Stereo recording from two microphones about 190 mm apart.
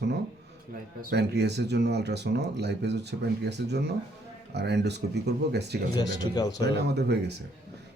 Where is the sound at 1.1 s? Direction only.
60° right (ahead or behind).